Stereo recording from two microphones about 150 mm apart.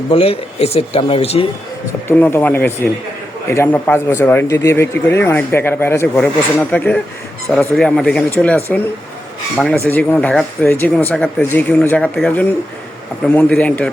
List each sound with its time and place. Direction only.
0.1 s speech: 40° left (ahead or behind)
2.0 s speech: 5° left (ahead or behind)
11.1 s speech: centre (ahead or behind)